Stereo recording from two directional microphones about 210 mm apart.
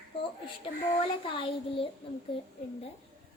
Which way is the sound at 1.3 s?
25° left (ahead or behind).